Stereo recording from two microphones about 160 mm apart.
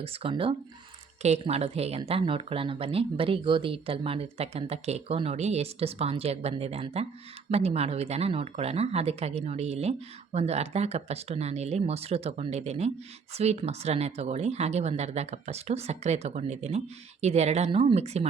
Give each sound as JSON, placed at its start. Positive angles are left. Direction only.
{"t": 0.0, "sound": "speech", "side_deg": -35}